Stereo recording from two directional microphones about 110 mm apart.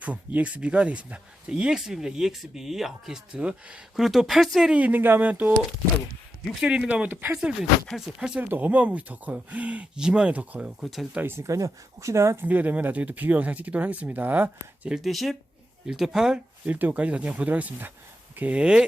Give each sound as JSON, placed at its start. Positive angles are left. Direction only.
{"t": 0.0, "sound": "speech", "side_deg": -15}
{"t": 7.9, "sound": "speech", "side_deg": -5}
{"t": 12.5, "sound": "speech", "side_deg": -15}